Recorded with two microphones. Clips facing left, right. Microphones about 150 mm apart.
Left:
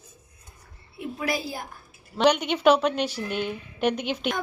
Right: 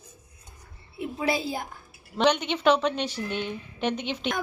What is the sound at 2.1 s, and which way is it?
A woman's voice, 10° left (ahead or behind).